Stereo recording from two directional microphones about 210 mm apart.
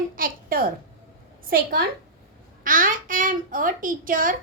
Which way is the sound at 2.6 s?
40° right (ahead or behind).